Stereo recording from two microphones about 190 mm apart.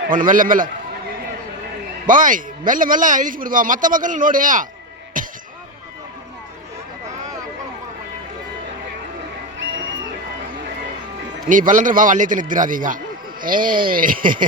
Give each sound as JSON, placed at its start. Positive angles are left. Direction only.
{"t": 0.1, "sound": "a man's voice", "side_deg": -45}
{"t": 2.0, "sound": "a man's voice", "side_deg": -45}
{"t": 5.2, "sound": "a sound", "side_deg": -45}
{"t": 11.4, "sound": "a man's voice", "side_deg": -45}